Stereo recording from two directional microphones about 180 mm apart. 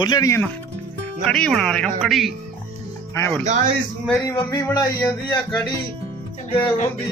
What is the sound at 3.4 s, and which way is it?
Speech, 40° right (ahead or behind).